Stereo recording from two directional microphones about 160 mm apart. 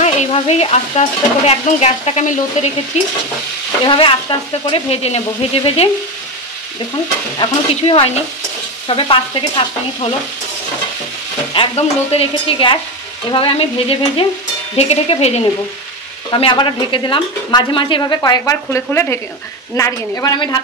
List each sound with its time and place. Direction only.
0.0 s stir: 40° left (ahead or behind)
1.5 s a woman's voice: 40° left (ahead or behind)
3.8 s speech: 30° left (ahead or behind)
7.3 s speech: 35° left (ahead or behind)
11.5 s speech: 35° left (ahead or behind)
16.3 s speech: 30° left (ahead or behind)